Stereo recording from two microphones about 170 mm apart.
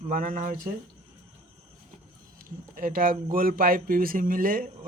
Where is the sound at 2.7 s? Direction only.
55° right (ahead or behind).